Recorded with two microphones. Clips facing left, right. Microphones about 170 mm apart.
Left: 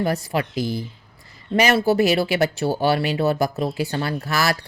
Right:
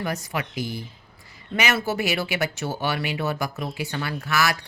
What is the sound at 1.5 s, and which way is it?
Speech, 35° left (ahead or behind).